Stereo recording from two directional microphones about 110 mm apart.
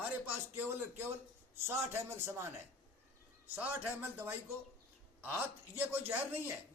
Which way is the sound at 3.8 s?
20° right (ahead or behind).